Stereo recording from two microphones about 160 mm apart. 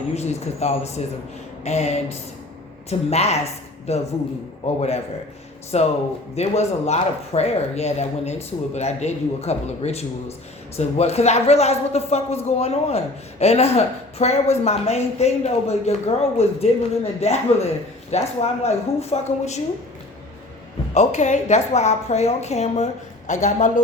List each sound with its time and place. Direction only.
0.1 s speech: 40° left (ahead or behind)
3.1 s speech: 40° left (ahead or behind)
20.9 s speech: 45° left (ahead or behind)